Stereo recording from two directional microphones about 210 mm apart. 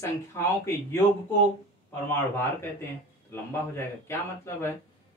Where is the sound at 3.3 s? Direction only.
10° left (ahead or behind).